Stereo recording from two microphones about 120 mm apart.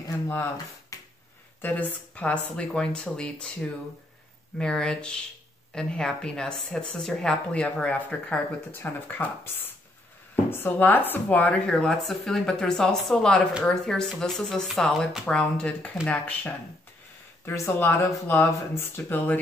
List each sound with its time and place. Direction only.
0.3 s speech: 20° left (ahead or behind)